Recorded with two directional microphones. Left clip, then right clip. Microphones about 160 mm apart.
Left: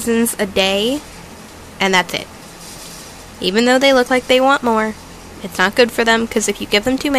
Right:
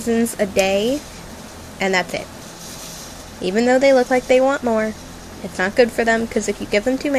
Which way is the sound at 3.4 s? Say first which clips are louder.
Left 2 dB; 15° left (ahead or behind).